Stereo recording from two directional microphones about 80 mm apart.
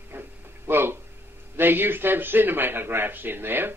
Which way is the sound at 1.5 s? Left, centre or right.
Right.